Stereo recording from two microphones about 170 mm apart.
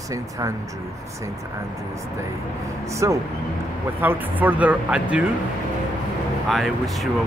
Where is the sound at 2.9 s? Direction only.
20° right (ahead or behind).